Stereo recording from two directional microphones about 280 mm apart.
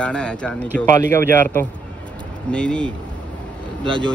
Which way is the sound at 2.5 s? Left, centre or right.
Centre.